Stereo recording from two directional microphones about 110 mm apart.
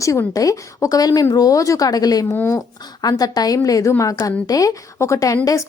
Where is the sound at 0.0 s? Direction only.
30° left (ahead or behind).